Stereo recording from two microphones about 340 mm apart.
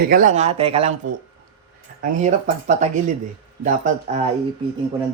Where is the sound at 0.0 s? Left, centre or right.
Right.